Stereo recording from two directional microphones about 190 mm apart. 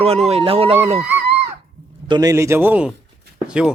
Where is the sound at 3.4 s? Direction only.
5° right (ahead or behind).